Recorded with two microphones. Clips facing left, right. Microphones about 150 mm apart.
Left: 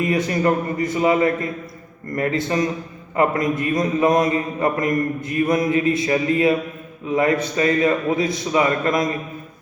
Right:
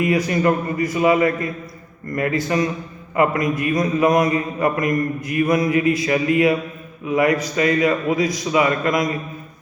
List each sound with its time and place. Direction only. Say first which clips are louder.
0.1 s a man's voice: right 1 dB; 30° left (ahead or behind)